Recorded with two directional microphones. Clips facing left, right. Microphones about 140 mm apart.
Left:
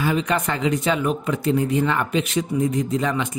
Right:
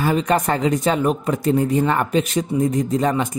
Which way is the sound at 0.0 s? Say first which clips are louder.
Right 3 dB; 40° right (ahead or behind).